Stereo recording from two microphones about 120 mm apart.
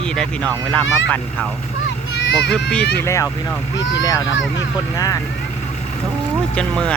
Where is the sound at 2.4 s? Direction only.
5° left (ahead or behind).